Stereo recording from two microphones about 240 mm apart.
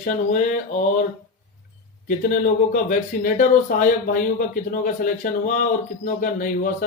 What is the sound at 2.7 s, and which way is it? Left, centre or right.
Speech, left.